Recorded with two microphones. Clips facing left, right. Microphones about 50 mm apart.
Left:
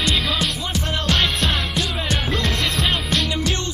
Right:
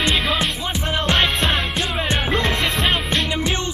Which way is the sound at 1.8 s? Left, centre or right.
Right.